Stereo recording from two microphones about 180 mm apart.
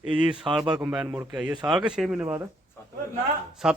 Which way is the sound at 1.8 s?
5° right (ahead or behind).